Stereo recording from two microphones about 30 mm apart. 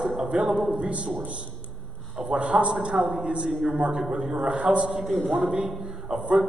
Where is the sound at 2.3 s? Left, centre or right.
Right.